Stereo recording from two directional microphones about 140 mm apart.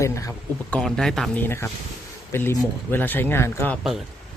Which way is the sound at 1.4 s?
15° left (ahead or behind).